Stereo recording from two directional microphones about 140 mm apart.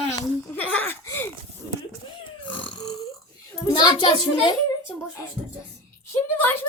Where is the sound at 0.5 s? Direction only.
10° left (ahead or behind).